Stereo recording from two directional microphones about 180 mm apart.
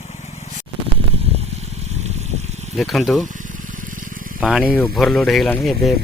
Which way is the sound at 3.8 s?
50° right (ahead or behind).